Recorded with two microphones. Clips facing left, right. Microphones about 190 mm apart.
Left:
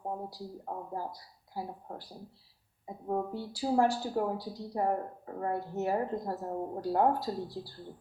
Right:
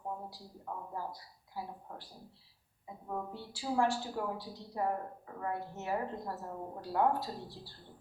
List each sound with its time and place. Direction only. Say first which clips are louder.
0.1 s a woman's voice: left 5 dB; 40° left (ahead or behind)